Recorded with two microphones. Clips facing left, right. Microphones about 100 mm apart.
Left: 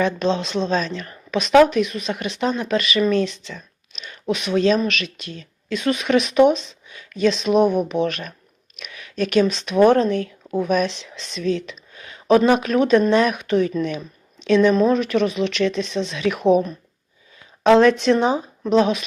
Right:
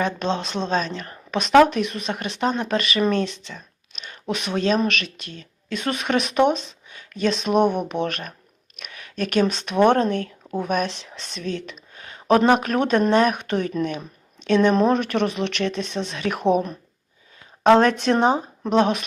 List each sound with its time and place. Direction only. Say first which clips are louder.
0.0 s speech: left 3 dB; 40° right (ahead or behind)
14.8 s speech: left 2 dB; 55° right (ahead or behind)
15.6 s speech: left 4 dB; 40° right (ahead or behind)
16.5 s speech: left 3 dB; 50° right (ahead or behind); by 18.7 s 35° right (ahead or behind)
18.7 s speech: left 2 dB; 50° right (ahead or behind)